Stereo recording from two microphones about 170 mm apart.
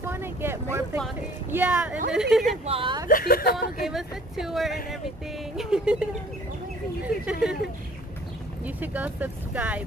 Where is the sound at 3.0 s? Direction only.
60° left (ahead or behind).